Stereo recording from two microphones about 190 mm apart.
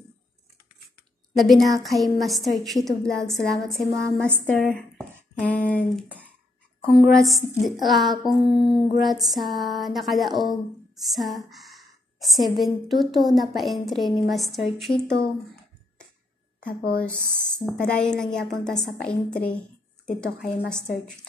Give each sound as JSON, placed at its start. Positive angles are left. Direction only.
{"t": 1.3, "sound": "speech", "side_deg": 0}
{"t": 16.6, "sound": "speech", "side_deg": 50}
{"t": 17.6, "sound": "speech", "side_deg": 5}